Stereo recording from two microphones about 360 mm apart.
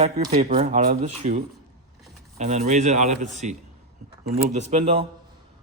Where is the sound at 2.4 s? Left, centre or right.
Centre.